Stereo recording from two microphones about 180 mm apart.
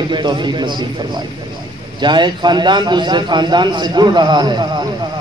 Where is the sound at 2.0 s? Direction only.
25° right (ahead or behind).